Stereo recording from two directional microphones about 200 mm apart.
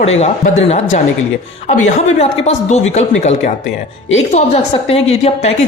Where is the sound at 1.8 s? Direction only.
35° left (ahead or behind).